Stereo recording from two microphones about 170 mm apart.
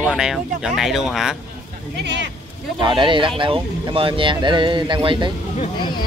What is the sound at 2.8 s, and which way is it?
Speech, 30° right (ahead or behind).